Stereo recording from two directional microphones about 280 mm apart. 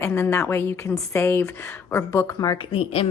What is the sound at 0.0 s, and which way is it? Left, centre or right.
A woman's voice, centre.